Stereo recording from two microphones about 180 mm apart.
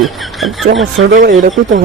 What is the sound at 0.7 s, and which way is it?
Speech, 90° right.